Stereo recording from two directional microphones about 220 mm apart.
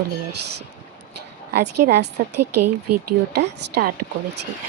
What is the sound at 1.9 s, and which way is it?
Speech, 50° right (ahead or behind).